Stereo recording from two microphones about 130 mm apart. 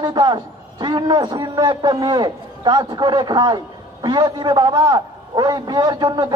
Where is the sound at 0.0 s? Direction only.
35° right (ahead or behind).